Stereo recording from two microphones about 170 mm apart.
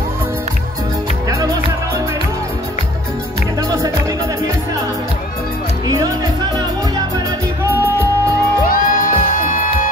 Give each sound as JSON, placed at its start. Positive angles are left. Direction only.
{"t": 8.6, "sound": "music", "side_deg": 55}